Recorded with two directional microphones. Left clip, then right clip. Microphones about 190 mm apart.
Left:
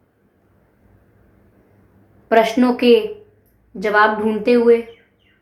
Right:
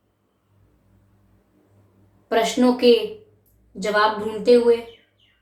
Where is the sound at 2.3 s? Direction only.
40° left (ahead or behind).